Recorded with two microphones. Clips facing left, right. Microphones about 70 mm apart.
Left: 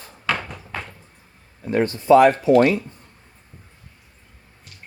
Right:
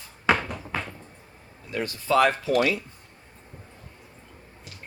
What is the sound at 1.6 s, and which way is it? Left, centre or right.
Speech, left.